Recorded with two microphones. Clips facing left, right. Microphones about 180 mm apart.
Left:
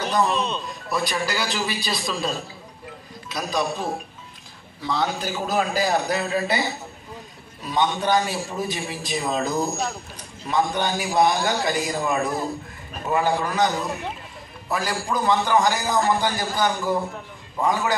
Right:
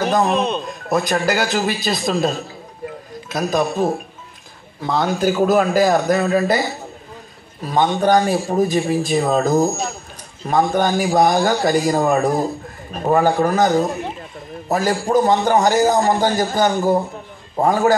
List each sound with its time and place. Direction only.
0.0 s speech: 50° right (ahead or behind)
7.6 s speech: 50° right (ahead or behind)